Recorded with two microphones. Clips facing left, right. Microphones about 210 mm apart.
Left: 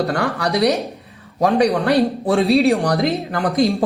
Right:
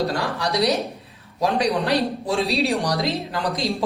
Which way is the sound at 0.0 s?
55° left (ahead or behind).